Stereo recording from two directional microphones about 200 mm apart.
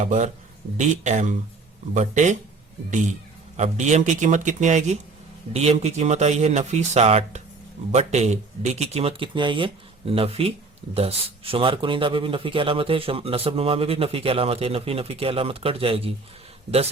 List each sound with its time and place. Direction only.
0.0 s speech: 35° right (ahead or behind)
3.6 s speech: 35° right (ahead or behind)